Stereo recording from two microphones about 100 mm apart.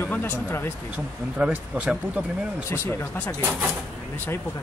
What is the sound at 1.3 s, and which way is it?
Speech, 10° right (ahead or behind).